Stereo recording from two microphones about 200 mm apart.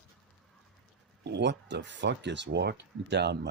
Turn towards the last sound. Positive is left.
turn(degrees=-55)  # may be behind; listen again after turning